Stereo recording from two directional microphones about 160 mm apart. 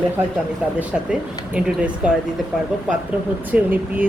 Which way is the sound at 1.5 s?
5° right (ahead or behind).